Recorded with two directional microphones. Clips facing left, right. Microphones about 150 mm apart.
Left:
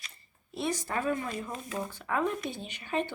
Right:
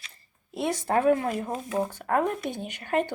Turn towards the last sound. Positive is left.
turn(degrees=-50)  # may be behind; listen again after turning